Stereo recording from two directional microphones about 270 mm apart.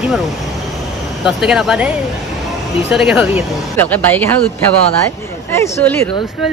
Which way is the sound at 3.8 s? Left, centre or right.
Centre.